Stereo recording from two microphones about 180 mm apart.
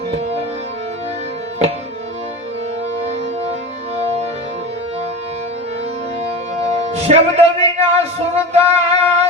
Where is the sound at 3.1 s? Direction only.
35° right (ahead or behind).